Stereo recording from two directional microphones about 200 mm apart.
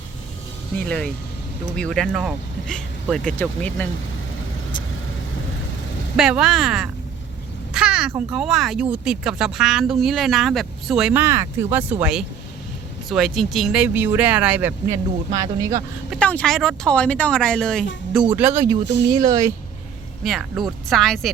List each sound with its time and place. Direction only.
0.9 s speech: 5° left (ahead or behind)
6.1 s speech: centre (ahead or behind)
7.7 s a sound: 5° right (ahead or behind)
8.3 s speech: centre (ahead or behind)
16.0 s speech: 5° left (ahead or behind)
18.3 s speech: 10° right (ahead or behind)
20.2 s speech: centre (ahead or behind)